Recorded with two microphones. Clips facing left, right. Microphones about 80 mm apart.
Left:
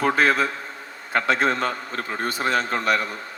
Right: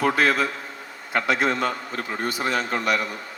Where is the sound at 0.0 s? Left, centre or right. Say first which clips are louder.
Left 1 dB; left.